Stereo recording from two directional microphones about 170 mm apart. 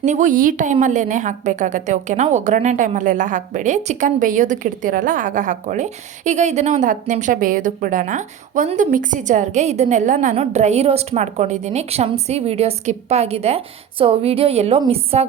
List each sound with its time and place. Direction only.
0.0 s a woman's voice: 45° right (ahead or behind)